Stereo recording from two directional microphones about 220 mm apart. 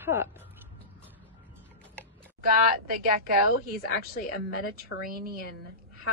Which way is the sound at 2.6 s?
40° right (ahead or behind).